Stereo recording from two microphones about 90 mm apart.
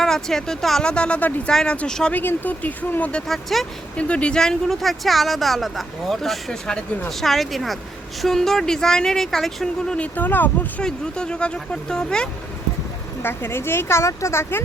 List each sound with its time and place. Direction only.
0.0 s speech: 5° left (ahead or behind)
2.1 s speech: 20° left (ahead or behind); by 3.7 s centre (ahead or behind)
3.9 s speech: 15° left (ahead or behind)
10.8 s speech: 10° left (ahead or behind)
13.2 s speech: 25° left (ahead or behind)